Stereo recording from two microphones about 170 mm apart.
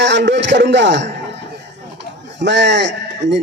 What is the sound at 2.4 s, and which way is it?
A man's voice, 90° right.